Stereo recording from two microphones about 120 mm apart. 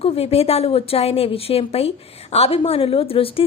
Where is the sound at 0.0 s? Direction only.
55° left (ahead or behind).